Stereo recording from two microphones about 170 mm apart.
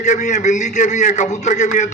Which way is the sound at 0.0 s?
45° left (ahead or behind).